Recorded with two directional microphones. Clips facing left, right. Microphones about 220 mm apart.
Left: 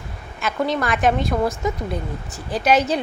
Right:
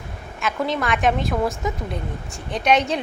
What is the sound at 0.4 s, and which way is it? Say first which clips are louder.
A woman's voice: left 1 dB; centre (ahead or behind).